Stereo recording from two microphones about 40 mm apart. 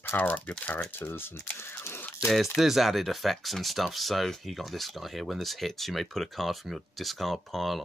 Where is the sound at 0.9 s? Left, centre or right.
Left.